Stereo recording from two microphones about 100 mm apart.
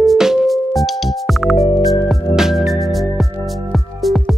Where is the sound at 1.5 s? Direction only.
75° left (ahead or behind).